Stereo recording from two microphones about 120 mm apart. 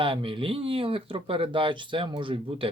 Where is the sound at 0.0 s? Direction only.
45° right (ahead or behind).